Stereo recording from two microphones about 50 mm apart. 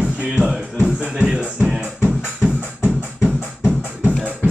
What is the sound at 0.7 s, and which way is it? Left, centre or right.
Music, centre.